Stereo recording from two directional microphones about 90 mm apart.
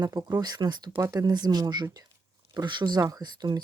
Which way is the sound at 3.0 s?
40° right (ahead or behind).